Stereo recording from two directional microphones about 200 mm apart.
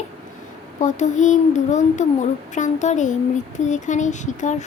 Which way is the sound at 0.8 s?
35° left (ahead or behind).